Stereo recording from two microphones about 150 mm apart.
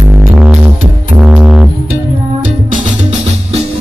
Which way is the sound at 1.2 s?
5° right (ahead or behind).